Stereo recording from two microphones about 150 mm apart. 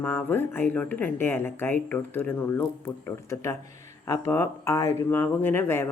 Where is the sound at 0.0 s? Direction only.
10° left (ahead or behind).